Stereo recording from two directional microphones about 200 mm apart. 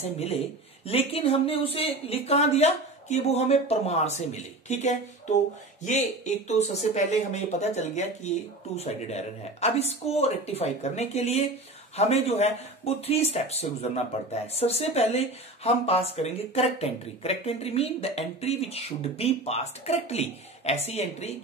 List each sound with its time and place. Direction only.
0.0 s speech: 30° left (ahead or behind)